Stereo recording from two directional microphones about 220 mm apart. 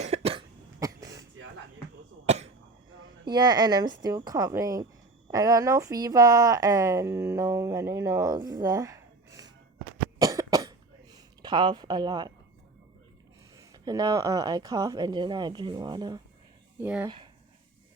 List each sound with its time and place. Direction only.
0.0 s cough: 30° right (ahead or behind)
0.8 s throat clearing: 15° right (ahead or behind)
2.2 s cough: 30° right (ahead or behind)
3.2 s speech: 20° right (ahead or behind)
10.2 s cough: 15° right (ahead or behind)
13.6 s speech: 15° right (ahead or behind)
16.8 s speech: 5° right (ahead or behind)